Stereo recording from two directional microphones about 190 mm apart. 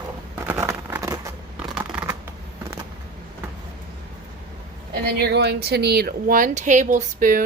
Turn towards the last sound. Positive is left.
turn(degrees=-45)  # may be behind; listen again after turning